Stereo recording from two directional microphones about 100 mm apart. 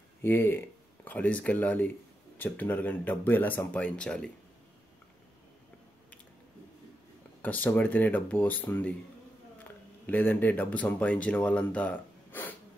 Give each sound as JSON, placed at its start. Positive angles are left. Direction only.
{"t": 0.2, "sound": "speech", "side_deg": 20}
{"t": 7.4, "sound": "speech", "side_deg": 15}
{"t": 10.0, "sound": "speech", "side_deg": 20}